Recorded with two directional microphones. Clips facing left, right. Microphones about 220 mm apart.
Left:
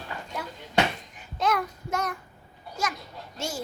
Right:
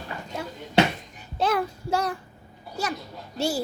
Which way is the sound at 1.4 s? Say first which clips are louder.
Right 2 dB; 30° right (ahead or behind).